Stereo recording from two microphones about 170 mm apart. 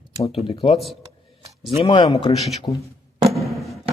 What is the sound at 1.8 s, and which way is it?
Speech, 30° left (ahead or behind).